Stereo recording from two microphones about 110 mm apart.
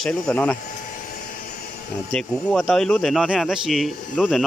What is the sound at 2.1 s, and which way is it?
Speech, centre (ahead or behind).